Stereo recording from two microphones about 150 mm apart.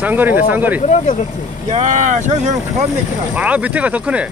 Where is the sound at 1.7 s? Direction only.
55° right (ahead or behind).